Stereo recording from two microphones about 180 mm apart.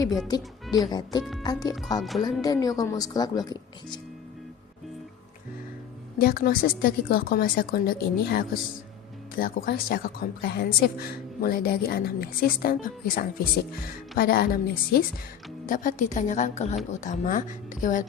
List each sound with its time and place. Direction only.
0.3 s speech: 25° left (ahead or behind)
2.0 s speech: centre (ahead or behind)
2.4 s speech: 20° left (ahead or behind)
6.1 s a woman's voice: 55° left (ahead or behind)